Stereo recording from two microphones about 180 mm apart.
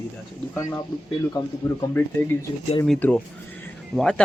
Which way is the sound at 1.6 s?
20° left (ahead or behind).